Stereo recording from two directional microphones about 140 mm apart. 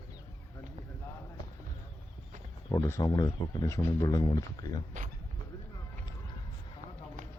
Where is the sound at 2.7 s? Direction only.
25° left (ahead or behind).